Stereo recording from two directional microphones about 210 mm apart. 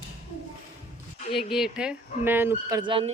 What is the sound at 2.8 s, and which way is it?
Speech, 25° right (ahead or behind).